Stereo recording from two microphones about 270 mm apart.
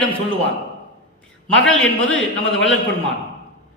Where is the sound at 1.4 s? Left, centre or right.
Centre.